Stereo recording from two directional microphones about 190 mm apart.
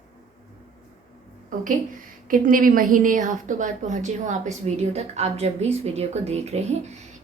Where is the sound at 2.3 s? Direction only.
45° right (ahead or behind).